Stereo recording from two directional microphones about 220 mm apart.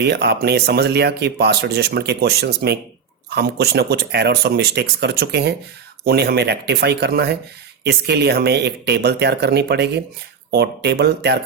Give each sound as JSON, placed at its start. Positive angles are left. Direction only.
{"t": 0.0, "sound": "speech", "side_deg": -50}